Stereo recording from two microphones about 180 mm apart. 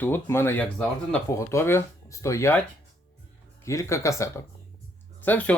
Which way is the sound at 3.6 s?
15° left (ahead or behind).